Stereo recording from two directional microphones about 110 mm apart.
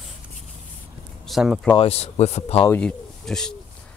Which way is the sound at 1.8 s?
70° left (ahead or behind).